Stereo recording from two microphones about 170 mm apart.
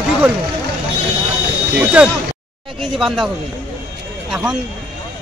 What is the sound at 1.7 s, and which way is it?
Speech, 5° right (ahead or behind).